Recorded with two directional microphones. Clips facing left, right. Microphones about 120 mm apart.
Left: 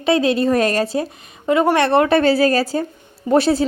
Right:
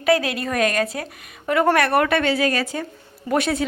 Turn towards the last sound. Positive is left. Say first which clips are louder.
# left 6 dB
turn(degrees=30)  # may be behind; listen again after turning